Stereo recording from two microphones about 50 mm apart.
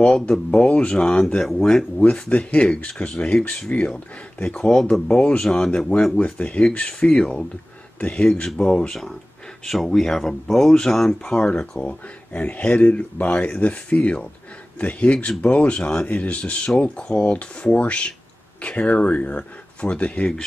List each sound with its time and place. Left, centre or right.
0.0 s speech: centre
2.0 s speech: left
4.9 s speech: centre
8.6 s speech: centre
11.3 s speech: left